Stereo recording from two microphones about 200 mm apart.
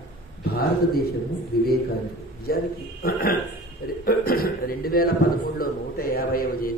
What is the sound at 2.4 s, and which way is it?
Speech, 50° left (ahead or behind).